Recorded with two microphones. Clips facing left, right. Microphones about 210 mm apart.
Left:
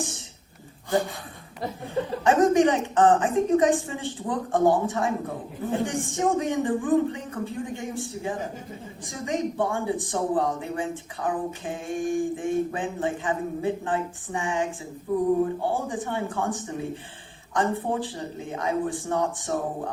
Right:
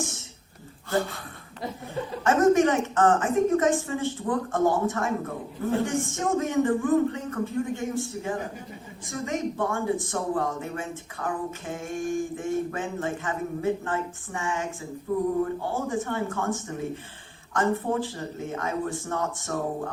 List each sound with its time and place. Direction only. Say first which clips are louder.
0.9 s speech: left 2 dB; 15° left (ahead or behind)
2.2 s speech: even; 15° left (ahead or behind)